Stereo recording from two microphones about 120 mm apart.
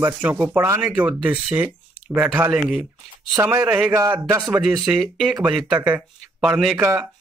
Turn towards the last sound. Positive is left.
turn(degrees=-5)  # may be behind; listen again after turning